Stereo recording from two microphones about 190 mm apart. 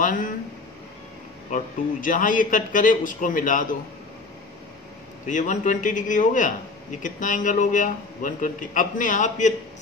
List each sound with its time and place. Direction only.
1.5 s a man's voice: 45° left (ahead or behind)
5.2 s a man's voice: 40° left (ahead or behind)